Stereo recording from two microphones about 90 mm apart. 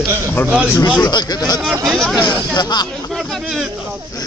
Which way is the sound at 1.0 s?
50° left (ahead or behind).